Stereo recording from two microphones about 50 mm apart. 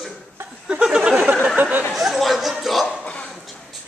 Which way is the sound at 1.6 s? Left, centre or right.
Right.